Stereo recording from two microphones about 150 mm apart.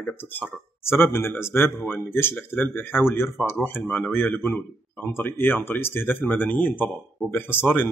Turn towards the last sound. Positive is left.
turn(degrees=15)  # may be behind; listen again after turning